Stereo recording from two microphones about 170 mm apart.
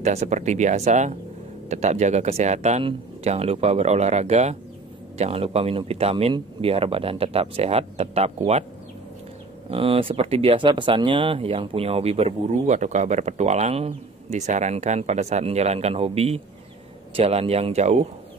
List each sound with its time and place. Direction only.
0.0 s speech: 40° right (ahead or behind)
9.7 s speech: 35° right (ahead or behind)